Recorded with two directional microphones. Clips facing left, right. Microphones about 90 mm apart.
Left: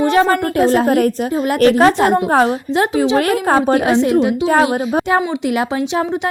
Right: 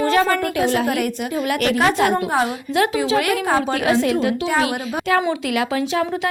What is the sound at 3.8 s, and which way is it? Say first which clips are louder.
Speech: left 5 dB; 25° left (ahead or behind).